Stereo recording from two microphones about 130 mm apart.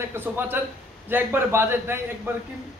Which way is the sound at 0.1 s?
15° right (ahead or behind).